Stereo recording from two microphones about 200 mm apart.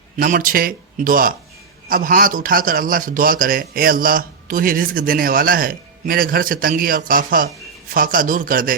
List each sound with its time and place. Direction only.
0.2 s a man's voice: 45° right (ahead or behind)